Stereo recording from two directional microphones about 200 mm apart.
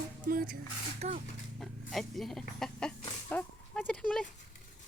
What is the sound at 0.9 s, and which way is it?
Speech, 35° right (ahead or behind).